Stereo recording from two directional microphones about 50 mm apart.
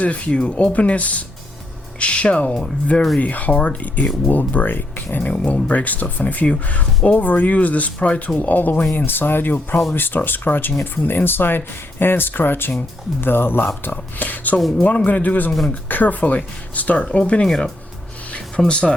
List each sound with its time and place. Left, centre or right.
0.0 s speech: left
5.3 s speech: left
14.2 s speech: left
18.3 s a sound: left
18.7 s speech: left